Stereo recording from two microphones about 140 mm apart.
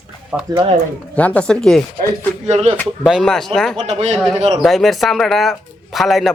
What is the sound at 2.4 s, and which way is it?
Speech, 50° right (ahead or behind).